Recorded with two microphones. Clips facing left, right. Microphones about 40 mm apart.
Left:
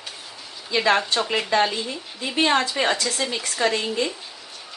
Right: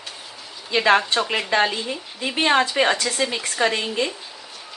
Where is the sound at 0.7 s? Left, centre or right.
Right.